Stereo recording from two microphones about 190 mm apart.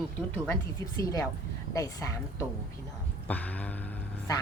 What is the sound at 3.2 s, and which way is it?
Speech, 10° left (ahead or behind).